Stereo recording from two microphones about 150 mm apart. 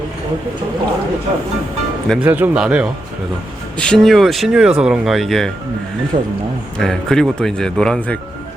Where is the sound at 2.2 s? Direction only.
10° right (ahead or behind).